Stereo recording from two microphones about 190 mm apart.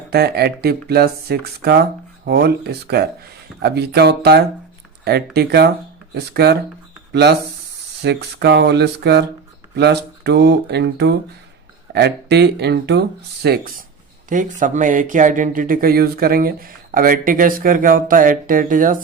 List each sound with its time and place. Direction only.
0.1 s speech: 55° right (ahead or behind)